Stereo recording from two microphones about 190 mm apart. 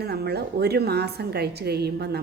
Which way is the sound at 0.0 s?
60° right (ahead or behind).